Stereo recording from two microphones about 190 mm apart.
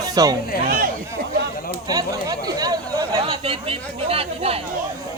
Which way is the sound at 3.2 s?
30° right (ahead or behind).